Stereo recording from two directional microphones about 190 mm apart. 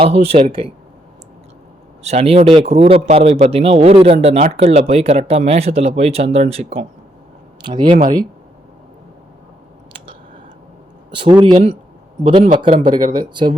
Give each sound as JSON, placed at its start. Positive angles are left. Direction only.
{"t": 0.0, "sound": "a man's voice", "side_deg": -30}
{"t": 2.0, "sound": "a man's voice", "side_deg": -30}
{"t": 11.2, "sound": "speech", "side_deg": -25}